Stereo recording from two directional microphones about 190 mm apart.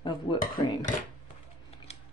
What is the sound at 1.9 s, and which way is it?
Scissors, 35° left (ahead or behind).